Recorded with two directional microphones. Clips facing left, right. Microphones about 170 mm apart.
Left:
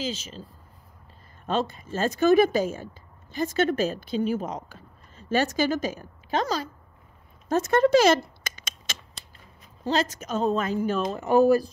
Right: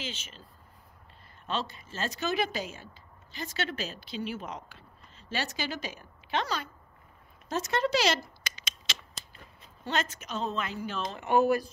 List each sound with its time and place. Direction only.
0.0 s a woman's voice: 40° left (ahead or behind)
1.4 s speech: 50° left (ahead or behind)
7.4 s a sound: 50° left (ahead or behind)
9.8 s a woman's voice: 35° left (ahead or behind)